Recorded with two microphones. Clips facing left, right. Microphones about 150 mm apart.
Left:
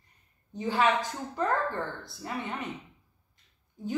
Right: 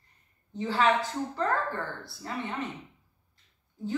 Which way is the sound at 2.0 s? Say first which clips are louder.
Even; 20° left (ahead or behind).